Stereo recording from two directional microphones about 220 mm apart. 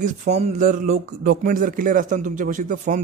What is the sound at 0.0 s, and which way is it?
A man's voice, 30° right (ahead or behind).